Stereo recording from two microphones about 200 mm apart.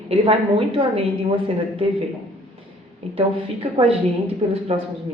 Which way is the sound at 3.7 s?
30° right (ahead or behind).